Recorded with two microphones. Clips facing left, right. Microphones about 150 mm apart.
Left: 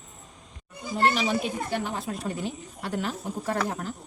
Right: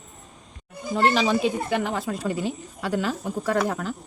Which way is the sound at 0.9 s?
90° right.